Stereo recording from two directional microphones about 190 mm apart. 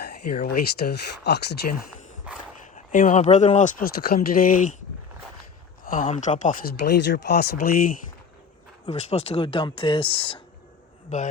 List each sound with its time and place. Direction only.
0.0 s speech: 55° left (ahead or behind)
2.7 s speech: 40° left (ahead or behind)
5.8 s a sound: 45° left (ahead or behind)
6.1 s speech: 40° left (ahead or behind)
8.9 s speech: 35° left (ahead or behind)
11.1 s speech: 40° left (ahead or behind)